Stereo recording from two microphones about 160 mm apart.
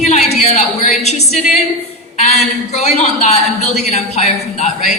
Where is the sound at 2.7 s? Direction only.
45° left (ahead or behind).